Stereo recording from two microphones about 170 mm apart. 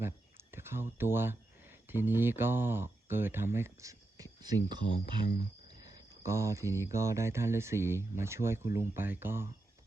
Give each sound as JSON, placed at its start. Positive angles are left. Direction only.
{"t": 0.0, "sound": "speech", "side_deg": -15}
{"t": 5.6, "sound": "cricket", "side_deg": -20}
{"t": 6.8, "sound": "speech", "side_deg": -15}